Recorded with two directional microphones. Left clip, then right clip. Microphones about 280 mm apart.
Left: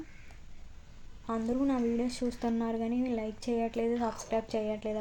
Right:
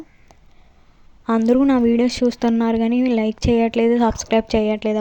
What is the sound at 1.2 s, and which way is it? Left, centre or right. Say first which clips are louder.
A woman's voice: right 15 dB; right.